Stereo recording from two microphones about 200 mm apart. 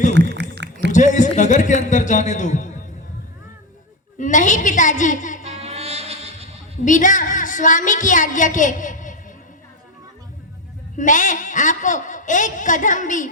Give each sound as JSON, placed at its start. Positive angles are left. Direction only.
{"t": 0.1, "sound": "a sound", "side_deg": -60}
{"t": 0.9, "sound": "a man's voice", "side_deg": 40}
{"t": 4.2, "sound": "a man's voice", "side_deg": 40}
{"t": 5.4, "sound": "music", "side_deg": -30}
{"t": 6.8, "sound": "a woman's voice", "side_deg": 40}
{"t": 10.9, "sound": "a man's voice", "side_deg": 40}